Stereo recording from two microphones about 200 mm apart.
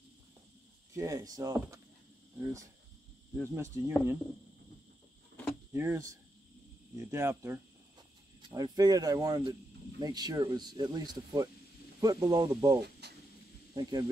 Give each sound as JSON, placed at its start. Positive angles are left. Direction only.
{"t": 0.9, "sound": "speech", "side_deg": -15}
{"t": 3.3, "sound": "speech", "side_deg": -15}
{"t": 5.7, "sound": "speech", "side_deg": -15}
{"t": 13.0, "sound": "a sound", "side_deg": -55}
{"t": 13.7, "sound": "speech", "side_deg": -20}